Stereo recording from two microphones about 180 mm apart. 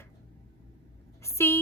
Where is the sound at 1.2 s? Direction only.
15° left (ahead or behind).